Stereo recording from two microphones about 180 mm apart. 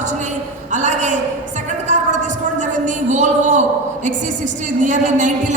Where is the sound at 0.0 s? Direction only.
40° right (ahead or behind).